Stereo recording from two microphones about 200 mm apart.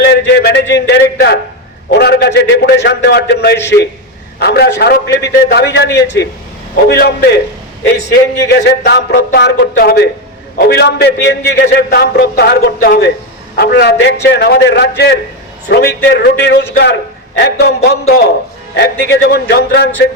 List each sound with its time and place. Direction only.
0.1 s a man's voice: 60° left (ahead or behind)
3.6 s a man's voice: 10° left (ahead or behind)
4.4 s a man's voice: 55° left (ahead or behind)
8.1 s a man's voice: 55° left (ahead or behind)